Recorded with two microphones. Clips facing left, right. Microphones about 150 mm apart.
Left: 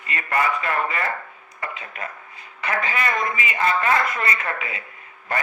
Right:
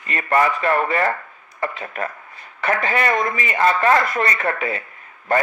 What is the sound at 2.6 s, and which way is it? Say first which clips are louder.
Speech: right 5 dB; 40° right (ahead or behind).